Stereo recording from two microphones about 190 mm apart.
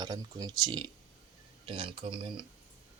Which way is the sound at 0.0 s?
20° right (ahead or behind).